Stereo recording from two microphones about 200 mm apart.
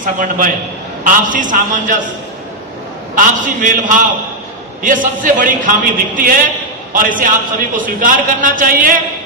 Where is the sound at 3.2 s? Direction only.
40° right (ahead or behind).